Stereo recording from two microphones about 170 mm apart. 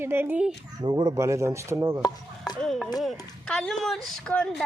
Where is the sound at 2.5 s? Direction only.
Centre (ahead or behind).